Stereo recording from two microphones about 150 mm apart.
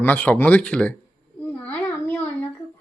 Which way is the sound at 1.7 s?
10° left (ahead or behind).